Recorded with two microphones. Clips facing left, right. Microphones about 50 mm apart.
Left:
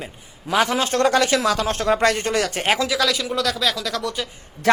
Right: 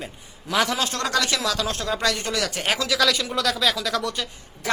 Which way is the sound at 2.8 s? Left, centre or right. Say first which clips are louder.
Left 1 dB; centre.